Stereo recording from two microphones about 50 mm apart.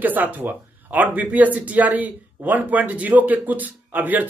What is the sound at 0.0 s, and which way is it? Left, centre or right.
Speech, right.